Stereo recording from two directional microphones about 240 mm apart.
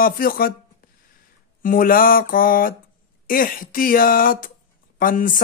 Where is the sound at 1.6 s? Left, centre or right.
Left.